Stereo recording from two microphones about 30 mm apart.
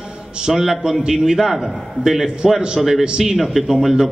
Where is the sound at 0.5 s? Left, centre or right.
Centre.